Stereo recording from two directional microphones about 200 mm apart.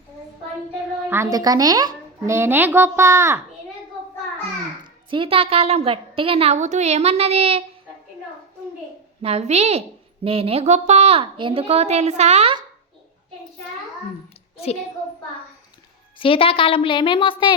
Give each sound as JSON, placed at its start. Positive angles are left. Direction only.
{"t": 1.1, "sound": "a child's voice", "side_deg": -15}
{"t": 4.8, "sound": "a woman's voice", "side_deg": -25}
{"t": 9.2, "sound": "a woman's voice", "side_deg": -30}
{"t": 14.5, "sound": "a sound", "side_deg": 30}
{"t": 16.1, "sound": "a woman's voice", "side_deg": 25}